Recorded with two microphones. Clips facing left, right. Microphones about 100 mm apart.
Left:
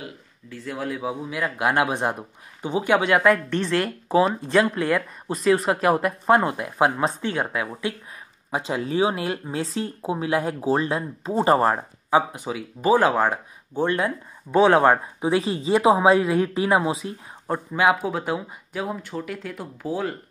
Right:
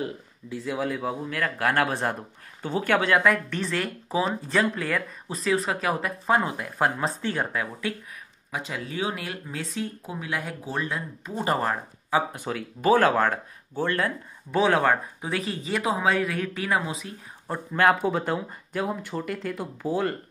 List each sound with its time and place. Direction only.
0.7 s speech: centre (ahead or behind)
1.3 s speech: 15° left (ahead or behind)
3.2 s speech: centre (ahead or behind)
3.8 s speech: 40° left (ahead or behind)
4.7 s speech: 10° left (ahead or behind)
5.3 s speech: centre (ahead or behind); by 7.9 s 15° left (ahead or behind)
8.5 s speech: 30° left (ahead or behind)
12.4 s speech: 10° left (ahead or behind)
17.5 s speech: 10° left (ahead or behind)